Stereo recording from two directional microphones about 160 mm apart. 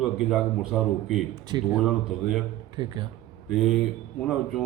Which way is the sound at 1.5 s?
25° right (ahead or behind).